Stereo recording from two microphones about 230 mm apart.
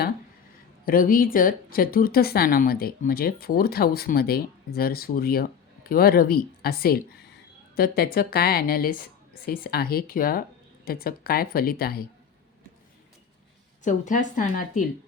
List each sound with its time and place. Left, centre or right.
0.9 s speech: left
13.8 s speech: left